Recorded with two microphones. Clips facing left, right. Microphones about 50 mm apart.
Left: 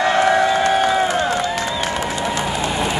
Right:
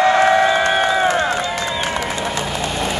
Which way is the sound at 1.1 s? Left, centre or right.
Right.